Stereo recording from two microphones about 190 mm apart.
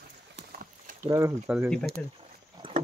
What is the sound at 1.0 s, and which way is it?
Speech, 15° right (ahead or behind).